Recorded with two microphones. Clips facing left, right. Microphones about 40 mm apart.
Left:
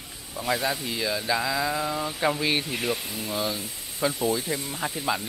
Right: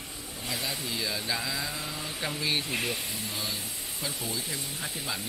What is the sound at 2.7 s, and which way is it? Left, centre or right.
Speech, centre.